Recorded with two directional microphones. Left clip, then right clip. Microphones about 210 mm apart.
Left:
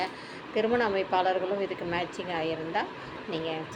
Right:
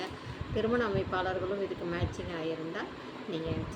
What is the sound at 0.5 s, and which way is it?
Speech, 15° right (ahead or behind).